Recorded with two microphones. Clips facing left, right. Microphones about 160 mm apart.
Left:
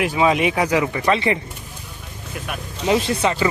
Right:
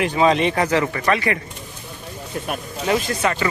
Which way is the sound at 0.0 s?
5° left (ahead or behind).